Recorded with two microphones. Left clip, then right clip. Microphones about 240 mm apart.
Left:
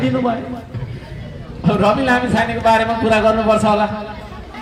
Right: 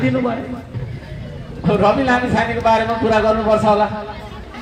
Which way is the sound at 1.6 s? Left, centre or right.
Left.